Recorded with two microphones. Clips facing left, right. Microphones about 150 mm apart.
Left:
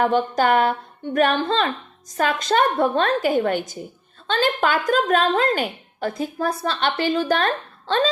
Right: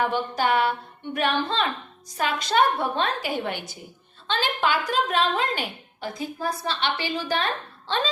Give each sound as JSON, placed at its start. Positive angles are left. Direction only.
{"t": 0.0, "sound": "a woman's voice", "side_deg": 50}